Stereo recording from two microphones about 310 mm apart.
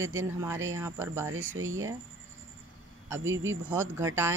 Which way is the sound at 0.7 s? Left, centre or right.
Centre.